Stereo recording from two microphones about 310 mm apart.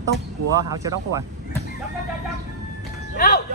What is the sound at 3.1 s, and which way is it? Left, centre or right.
Speech, left.